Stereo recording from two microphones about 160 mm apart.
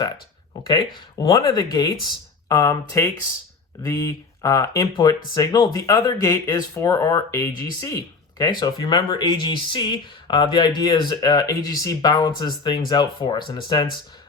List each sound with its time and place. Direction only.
1.2 s speech: 25° left (ahead or behind)